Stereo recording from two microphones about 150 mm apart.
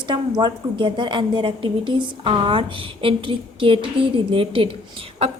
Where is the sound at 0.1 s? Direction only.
30° right (ahead or behind).